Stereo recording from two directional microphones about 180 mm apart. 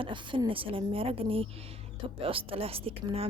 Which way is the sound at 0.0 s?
25° right (ahead or behind).